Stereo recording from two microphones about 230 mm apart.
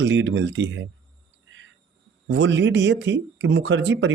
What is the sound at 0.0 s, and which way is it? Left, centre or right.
Speech, right.